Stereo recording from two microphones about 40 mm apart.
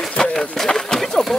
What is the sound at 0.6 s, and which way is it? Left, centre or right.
Speech, centre.